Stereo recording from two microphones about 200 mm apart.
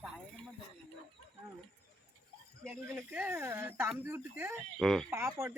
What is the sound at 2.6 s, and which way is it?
Speech, 10° right (ahead or behind).